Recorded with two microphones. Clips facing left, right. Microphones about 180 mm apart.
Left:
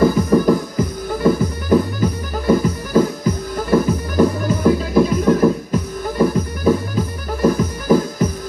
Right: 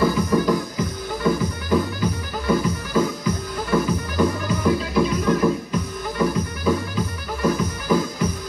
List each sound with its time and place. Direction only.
0.0 s music: 45° left (ahead or behind)